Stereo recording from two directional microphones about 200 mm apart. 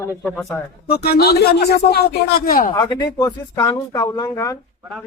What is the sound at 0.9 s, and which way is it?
A man's voice, 50° left (ahead or behind).